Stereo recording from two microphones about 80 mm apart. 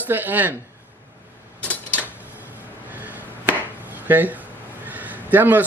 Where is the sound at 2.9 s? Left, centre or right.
Right.